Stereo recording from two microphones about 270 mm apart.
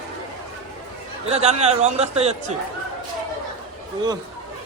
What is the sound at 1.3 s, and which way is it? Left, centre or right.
Speech, right.